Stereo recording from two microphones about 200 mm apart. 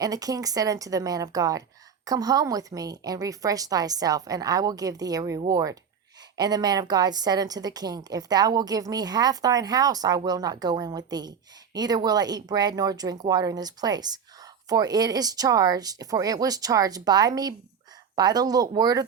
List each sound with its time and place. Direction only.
0.0 s a woman's voice: 20° right (ahead or behind)